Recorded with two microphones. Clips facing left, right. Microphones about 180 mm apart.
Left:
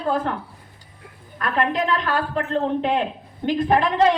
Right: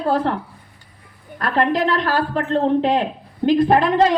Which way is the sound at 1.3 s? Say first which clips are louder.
Right 4 dB; 35° right (ahead or behind).